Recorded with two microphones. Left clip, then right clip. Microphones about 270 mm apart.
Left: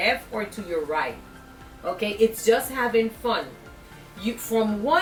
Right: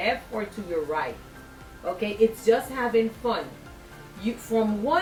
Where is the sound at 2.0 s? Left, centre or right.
Centre.